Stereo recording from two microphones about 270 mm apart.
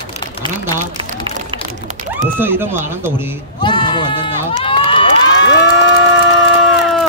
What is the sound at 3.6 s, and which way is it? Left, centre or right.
Run, centre.